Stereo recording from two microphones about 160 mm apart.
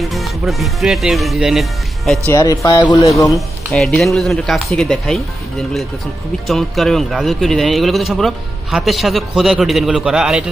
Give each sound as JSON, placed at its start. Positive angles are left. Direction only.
{"t": 0.1, "sound": "speech", "side_deg": 0}
{"t": 2.3, "sound": "speech", "side_deg": 20}
{"t": 3.3, "sound": "a man's voice", "side_deg": 0}